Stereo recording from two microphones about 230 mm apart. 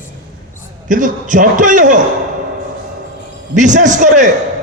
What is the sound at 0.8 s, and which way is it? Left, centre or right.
A man's voice, right.